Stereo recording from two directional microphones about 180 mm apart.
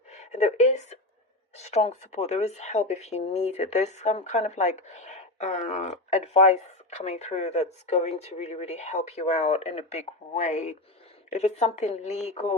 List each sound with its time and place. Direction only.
0.1 s a woman's voice: 40° left (ahead or behind)